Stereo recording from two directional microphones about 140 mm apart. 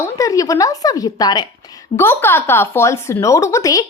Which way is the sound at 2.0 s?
15° left (ahead or behind).